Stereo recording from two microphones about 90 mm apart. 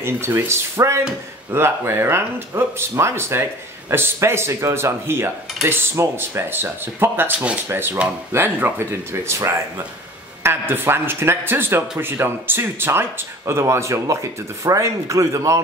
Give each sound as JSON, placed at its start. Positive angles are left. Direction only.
{"t": 0.0, "sound": "speech", "side_deg": -30}